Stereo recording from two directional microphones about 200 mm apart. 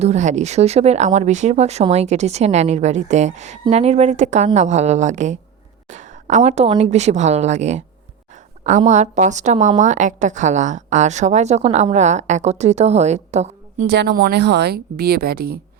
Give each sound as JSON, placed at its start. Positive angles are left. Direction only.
{"t": 0.0, "sound": "speech", "side_deg": -35}
{"t": 13.8, "sound": "a woman's voice", "side_deg": -55}